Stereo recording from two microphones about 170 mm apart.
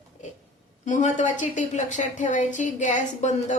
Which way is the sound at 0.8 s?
45° left (ahead or behind).